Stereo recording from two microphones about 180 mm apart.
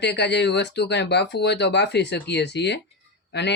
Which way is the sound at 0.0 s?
70° left (ahead or behind).